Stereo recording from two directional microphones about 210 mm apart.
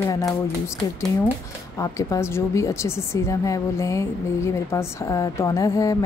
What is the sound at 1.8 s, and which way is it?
A woman's voice, 15° left (ahead or behind).